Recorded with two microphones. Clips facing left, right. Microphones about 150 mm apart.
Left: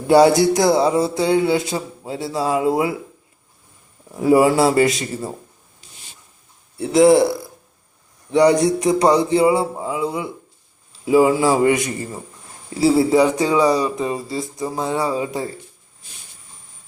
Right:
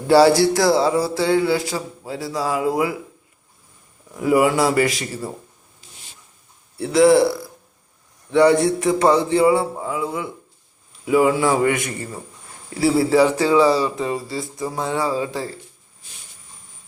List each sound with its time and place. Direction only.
0.1 s speech: 20° left (ahead or behind)
4.1 s speech: 30° left (ahead or behind)
6.7 s speech: 20° left (ahead or behind)